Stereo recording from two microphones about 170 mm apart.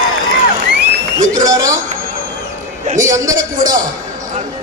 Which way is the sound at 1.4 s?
20° right (ahead or behind).